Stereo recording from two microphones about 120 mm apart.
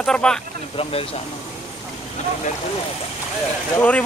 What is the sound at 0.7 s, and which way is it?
Speech, 50° left (ahead or behind).